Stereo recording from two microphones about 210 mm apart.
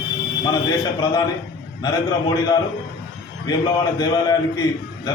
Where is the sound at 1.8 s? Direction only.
20° left (ahead or behind).